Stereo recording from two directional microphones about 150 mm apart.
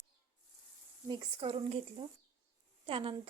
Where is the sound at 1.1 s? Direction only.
40° right (ahead or behind).